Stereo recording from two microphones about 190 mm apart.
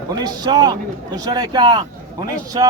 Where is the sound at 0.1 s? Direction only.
20° right (ahead or behind).